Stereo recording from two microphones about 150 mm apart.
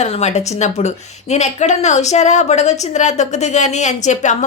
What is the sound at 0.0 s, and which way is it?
Speech, 50° left (ahead or behind).